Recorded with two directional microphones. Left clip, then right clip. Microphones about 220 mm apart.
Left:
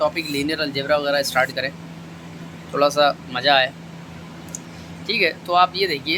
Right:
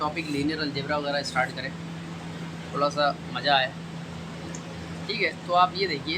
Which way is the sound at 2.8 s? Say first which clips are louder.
Left 7 dB; 40° left (ahead or behind).